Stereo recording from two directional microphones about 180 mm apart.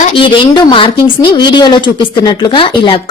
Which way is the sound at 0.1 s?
30° left (ahead or behind).